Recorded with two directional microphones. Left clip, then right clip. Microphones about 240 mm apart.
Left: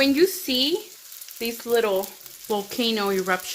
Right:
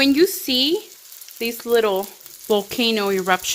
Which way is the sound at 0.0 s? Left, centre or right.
Right.